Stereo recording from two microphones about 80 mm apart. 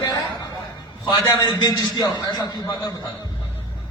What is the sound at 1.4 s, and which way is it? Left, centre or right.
A man's voice, left.